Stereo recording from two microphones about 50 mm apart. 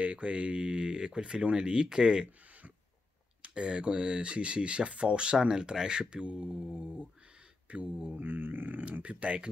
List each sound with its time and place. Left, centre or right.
0.0 s speech: right
3.4 s speech: centre
8.2 s speech: right